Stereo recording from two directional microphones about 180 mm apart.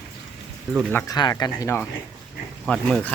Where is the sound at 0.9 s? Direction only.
20° left (ahead or behind).